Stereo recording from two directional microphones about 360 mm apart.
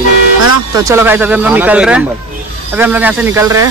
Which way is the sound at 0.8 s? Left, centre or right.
Centre.